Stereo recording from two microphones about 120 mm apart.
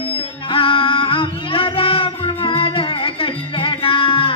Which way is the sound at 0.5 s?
45° left (ahead or behind).